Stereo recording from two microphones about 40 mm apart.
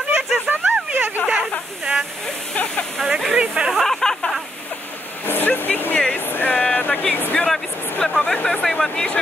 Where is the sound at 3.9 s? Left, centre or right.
Centre.